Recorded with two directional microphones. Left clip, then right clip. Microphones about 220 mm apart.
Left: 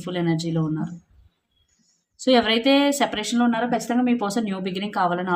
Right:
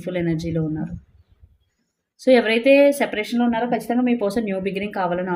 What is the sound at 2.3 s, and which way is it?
Speech, 15° left (ahead or behind).